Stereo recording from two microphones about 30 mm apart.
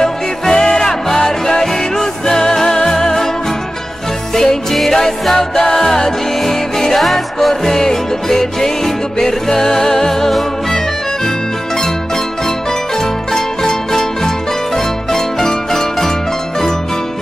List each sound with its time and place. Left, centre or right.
0.0 s music: centre
4.7 s music: centre
13.3 s music: centre